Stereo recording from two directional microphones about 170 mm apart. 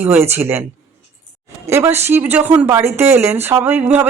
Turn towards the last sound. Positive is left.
turn(degrees=-10)  # may be behind; listen again after turning